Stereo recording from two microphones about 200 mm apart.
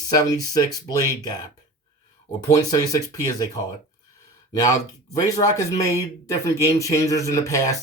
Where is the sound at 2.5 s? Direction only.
15° left (ahead or behind).